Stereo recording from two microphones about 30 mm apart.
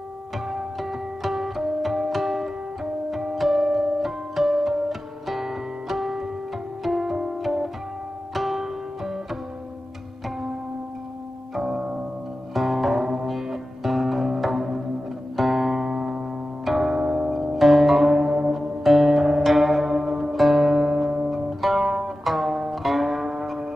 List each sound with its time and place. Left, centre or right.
0.7 s music: centre
12.5 s music: centre
15.9 s music: centre
16.6 s music: centre
17.0 s music: right
17.3 s zither: centre
18.5 s music: centre
20.1 s zither: centre
20.3 s music: centre
21.3 s zither: centre
22.2 s music: centre